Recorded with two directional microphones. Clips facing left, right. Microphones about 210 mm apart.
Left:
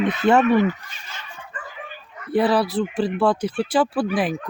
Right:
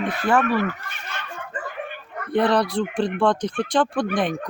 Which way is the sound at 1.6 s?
60° right (ahead or behind).